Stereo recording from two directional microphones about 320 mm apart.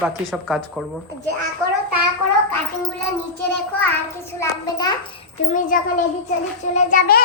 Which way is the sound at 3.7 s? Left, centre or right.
Centre.